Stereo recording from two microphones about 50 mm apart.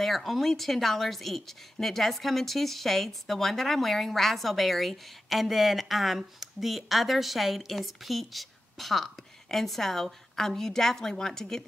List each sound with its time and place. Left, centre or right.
0.0 s a woman's voice: centre